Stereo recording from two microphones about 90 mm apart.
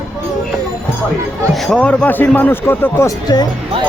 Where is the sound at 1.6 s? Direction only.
10° left (ahead or behind); by 3.1 s 25° left (ahead or behind).